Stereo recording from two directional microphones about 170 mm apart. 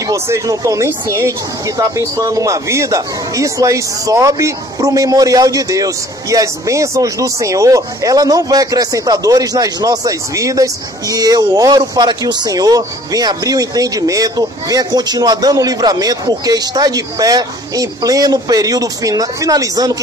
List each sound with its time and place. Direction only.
0.0 s speech: 20° right (ahead or behind)